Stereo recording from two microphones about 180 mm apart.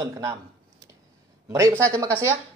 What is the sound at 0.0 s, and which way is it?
Speech, 15° right (ahead or behind).